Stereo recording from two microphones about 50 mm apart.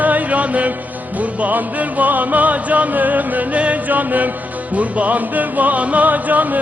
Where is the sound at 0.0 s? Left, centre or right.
Right.